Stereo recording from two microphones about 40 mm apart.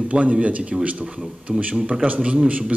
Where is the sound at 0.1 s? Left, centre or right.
Right.